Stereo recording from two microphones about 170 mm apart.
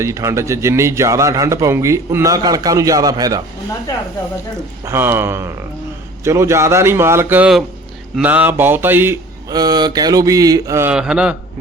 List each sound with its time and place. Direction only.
0.0 s a man's voice: 15° right (ahead or behind)
4.9 s a man's voice: 15° right (ahead or behind)
9.5 s speech: 25° right (ahead or behind)
10.9 s a man's voice: 5° right (ahead or behind)